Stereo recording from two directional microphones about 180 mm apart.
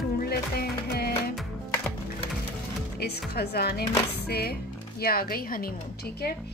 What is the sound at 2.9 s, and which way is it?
Music, 65° left (ahead or behind).